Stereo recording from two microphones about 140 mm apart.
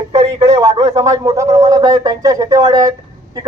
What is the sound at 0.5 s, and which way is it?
A man's voice, 25° right (ahead or behind).